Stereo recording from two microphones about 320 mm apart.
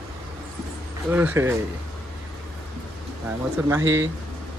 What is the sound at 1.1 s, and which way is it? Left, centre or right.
Speech, centre.